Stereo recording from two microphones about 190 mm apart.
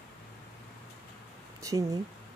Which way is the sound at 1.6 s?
15° right (ahead or behind).